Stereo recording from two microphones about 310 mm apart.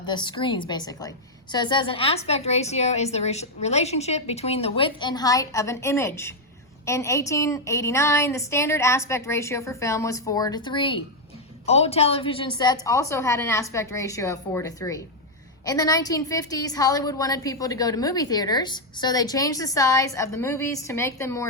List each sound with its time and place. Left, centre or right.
0.0 s a woman's voice: centre